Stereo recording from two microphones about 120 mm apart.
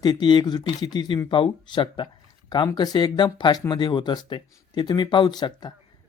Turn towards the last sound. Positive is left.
turn(degrees=35)  # may be behind; listen again after turning